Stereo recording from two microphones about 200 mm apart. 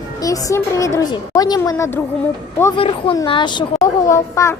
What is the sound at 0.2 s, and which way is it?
A woman's voice, 15° left (ahead or behind).